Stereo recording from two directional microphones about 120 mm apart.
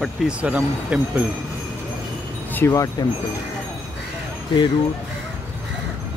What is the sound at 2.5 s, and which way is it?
Speech, 25° left (ahead or behind).